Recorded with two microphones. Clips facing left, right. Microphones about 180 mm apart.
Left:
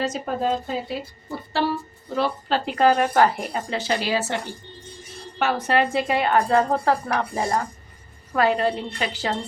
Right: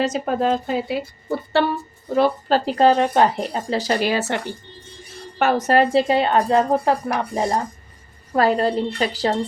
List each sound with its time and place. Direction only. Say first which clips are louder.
0.0 s speech: right 4 dB; 75° right (ahead or behind)
2.1 s a woman's voice: right 6 dB; 40° right (ahead or behind); by 3.6 s 25° right (ahead or behind)
3.7 s a woman's voice: right 6 dB; 35° right (ahead or behind)
4.0 s speech: right 3 dB; 60° right (ahead or behind)
5.4 s a woman's voice: right 4 dB; 45° right (ahead or behind); by 7.7 s 20° right (ahead or behind)
8.3 s a woman's voice: right 3 dB; 35° right (ahead or behind)